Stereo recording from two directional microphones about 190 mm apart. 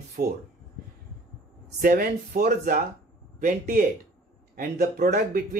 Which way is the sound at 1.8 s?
50° right (ahead or behind).